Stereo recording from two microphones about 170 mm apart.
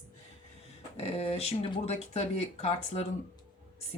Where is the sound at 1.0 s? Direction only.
35° left (ahead or behind).